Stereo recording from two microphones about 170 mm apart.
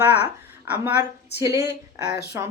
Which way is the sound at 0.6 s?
10° right (ahead or behind).